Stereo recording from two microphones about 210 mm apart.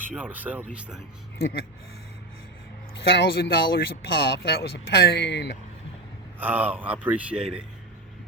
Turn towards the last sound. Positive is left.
turn(degrees=-5)  # may be behind; listen again after turning